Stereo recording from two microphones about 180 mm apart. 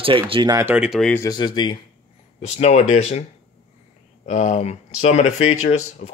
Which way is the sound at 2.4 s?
35° left (ahead or behind).